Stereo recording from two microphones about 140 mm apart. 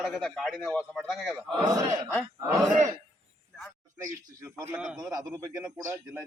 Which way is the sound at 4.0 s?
20° right (ahead or behind).